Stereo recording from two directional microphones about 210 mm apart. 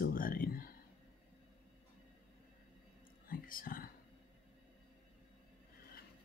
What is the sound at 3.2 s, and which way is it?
Whispering, 40° left (ahead or behind).